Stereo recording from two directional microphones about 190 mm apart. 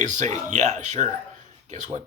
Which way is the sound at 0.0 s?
40° right (ahead or behind).